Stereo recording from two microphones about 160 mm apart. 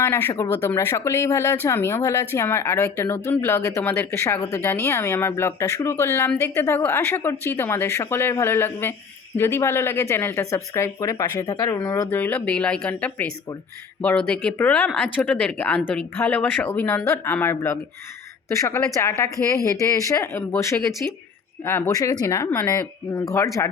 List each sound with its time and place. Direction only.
0.0 s a woman's voice: 15° left (ahead or behind)